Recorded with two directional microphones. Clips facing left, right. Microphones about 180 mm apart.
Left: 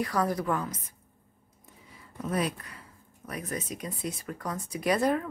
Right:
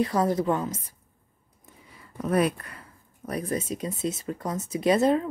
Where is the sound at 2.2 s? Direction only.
60° right (ahead or behind).